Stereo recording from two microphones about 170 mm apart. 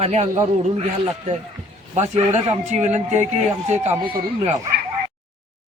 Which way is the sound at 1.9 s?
40° right (ahead or behind).